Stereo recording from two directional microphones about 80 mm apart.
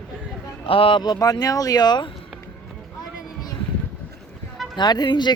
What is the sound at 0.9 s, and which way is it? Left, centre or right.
Speech, left.